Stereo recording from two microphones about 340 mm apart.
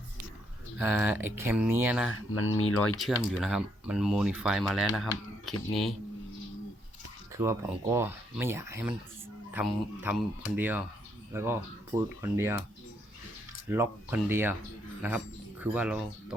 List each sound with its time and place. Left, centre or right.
0.8 s speech: centre
2.0 s speech: left
2.8 s speech: centre
7.3 s speech: centre
13.7 s speech: centre